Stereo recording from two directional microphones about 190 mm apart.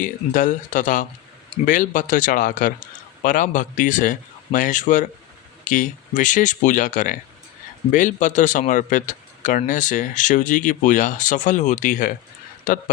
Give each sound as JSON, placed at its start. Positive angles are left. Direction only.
{"t": 0.0, "sound": "speech", "side_deg": 45}